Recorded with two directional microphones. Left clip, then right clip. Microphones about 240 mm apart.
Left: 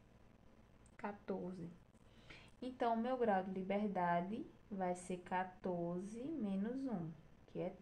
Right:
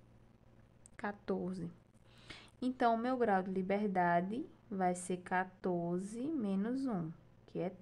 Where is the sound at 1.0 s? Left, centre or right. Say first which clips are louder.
Right 6 dB; right.